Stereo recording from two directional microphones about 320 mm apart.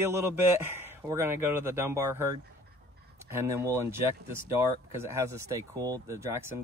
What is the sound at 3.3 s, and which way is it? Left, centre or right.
A man's voice, centre.